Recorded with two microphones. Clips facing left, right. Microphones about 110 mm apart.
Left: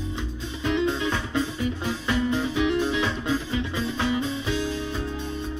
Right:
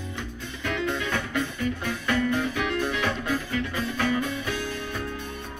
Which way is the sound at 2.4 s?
20° left (ahead or behind).